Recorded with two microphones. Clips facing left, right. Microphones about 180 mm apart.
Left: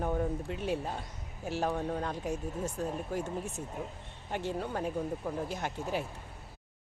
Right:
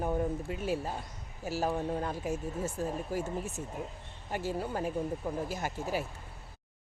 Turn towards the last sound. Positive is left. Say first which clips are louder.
# even
turn(degrees=-5)  # may be behind; listen again after turning